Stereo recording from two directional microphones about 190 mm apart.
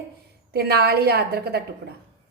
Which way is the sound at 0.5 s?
55° right (ahead or behind).